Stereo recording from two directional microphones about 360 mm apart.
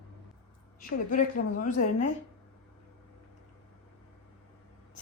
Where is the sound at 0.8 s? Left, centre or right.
Left.